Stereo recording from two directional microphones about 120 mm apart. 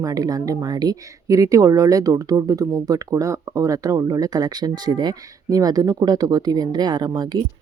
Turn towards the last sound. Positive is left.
turn(degrees=-35)  # may be behind; listen again after turning